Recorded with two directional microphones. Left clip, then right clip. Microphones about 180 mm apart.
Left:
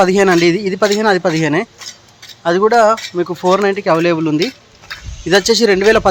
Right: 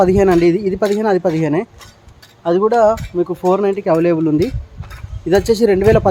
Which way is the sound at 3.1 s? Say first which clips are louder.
Even; 15° left (ahead or behind).